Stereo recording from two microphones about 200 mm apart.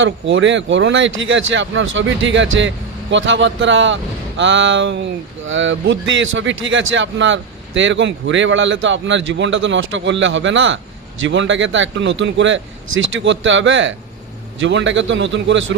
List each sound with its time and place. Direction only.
0.0 s speech: 65° right (ahead or behind)